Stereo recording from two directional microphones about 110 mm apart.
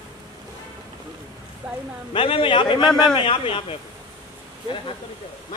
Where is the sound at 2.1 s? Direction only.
55° left (ahead or behind).